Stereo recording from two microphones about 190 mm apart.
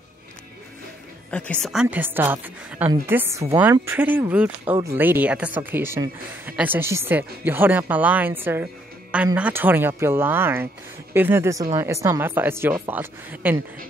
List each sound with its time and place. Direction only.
1.3 s speech: 5° left (ahead or behind); by 13.6 s 10° right (ahead or behind)